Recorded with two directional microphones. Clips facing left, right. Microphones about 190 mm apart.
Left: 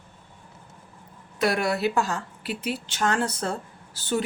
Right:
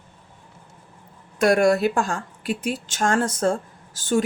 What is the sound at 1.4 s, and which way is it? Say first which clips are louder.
A woman's voice: right 6 dB; 50° right (ahead or behind).